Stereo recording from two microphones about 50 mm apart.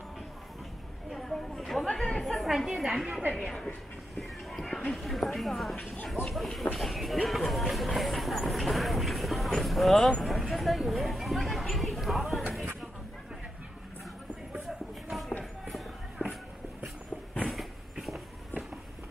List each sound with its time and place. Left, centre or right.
1.1 s a sound: centre
1.9 s chatter: centre
2.4 s a woman's voice: centre
3.1 s a woman's voice: right
3.3 s a woman's voice: centre
10.2 s a sound: centre
16.2 s walk: right